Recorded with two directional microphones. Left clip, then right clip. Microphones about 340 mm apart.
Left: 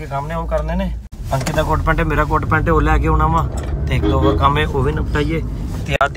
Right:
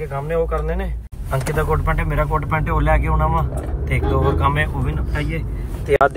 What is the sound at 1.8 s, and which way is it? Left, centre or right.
Speech, centre.